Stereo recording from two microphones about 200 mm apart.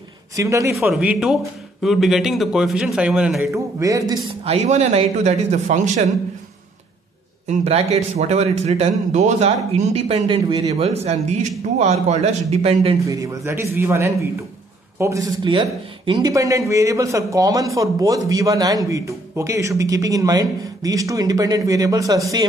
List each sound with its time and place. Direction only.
0.4 s a man's voice: 15° right (ahead or behind)
0.7 s a man's voice: 5° right (ahead or behind)
3.5 s a man's voice: 15° right (ahead or behind)
4.3 s speech: 30° right (ahead or behind)
7.4 s speech: 30° right (ahead or behind)
13.0 s a man's voice: 15° right (ahead or behind)